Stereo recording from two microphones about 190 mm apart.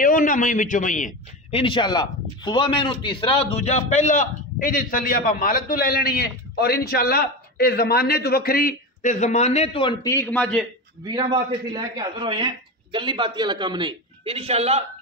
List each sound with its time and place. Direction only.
0.0 s a man's voice: 45° left (ahead or behind)
1.5 s a man's voice: 25° left (ahead or behind)
10.0 s a man's voice: 15° left (ahead or behind)
11.1 s a man's voice: 25° right (ahead or behind)